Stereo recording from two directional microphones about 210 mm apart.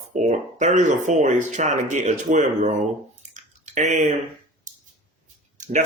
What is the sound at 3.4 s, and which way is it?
Typing, 35° right (ahead or behind).